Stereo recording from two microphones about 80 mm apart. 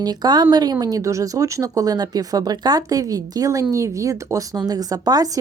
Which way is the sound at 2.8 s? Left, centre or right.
Right.